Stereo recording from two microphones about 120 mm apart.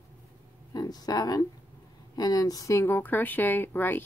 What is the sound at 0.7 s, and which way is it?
Speech, 35° left (ahead or behind).